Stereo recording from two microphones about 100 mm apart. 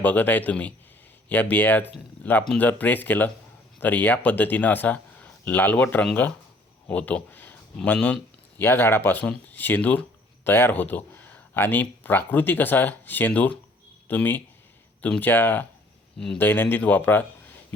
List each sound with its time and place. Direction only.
0.0 s speech: 15° left (ahead or behind)
7.9 s a sound: 10° left (ahead or behind)
8.6 s speech: 25° left (ahead or behind)
16.1 s speech: 5° left (ahead or behind)
16.4 s speech: 20° left (ahead or behind)